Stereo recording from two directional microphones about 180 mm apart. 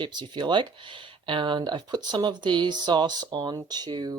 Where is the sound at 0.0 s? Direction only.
25° right (ahead or behind).